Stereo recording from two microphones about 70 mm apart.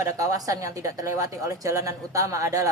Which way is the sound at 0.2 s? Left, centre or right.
Right.